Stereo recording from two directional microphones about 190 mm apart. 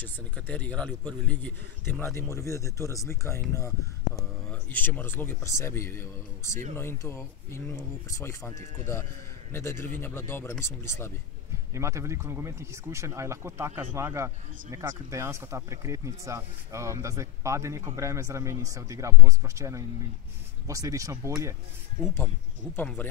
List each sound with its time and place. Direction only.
0.0 s speech: 10° left (ahead or behind)
9.5 s speech: 15° left (ahead or behind)
11.7 s speech: 15° right (ahead or behind)
22.0 s speech: 10° left (ahead or behind)